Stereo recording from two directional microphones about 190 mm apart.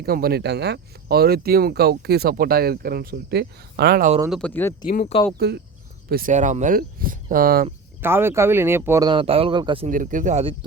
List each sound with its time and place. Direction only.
0.0 s speech: 55° right (ahead or behind)
4.3 s speech: 5° left (ahead or behind)
5.4 s speech: 60° right (ahead or behind)
6.1 s speech: 50° right (ahead or behind)
8.0 s speech: 10° right (ahead or behind)
9.8 s speech: 45° right (ahead or behind)